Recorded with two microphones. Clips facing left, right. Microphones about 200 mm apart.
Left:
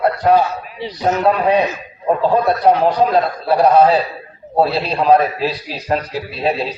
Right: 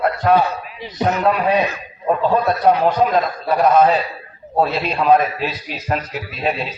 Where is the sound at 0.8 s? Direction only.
30° left (ahead or behind).